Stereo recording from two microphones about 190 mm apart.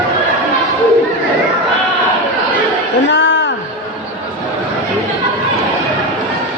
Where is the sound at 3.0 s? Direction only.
70° left (ahead or behind).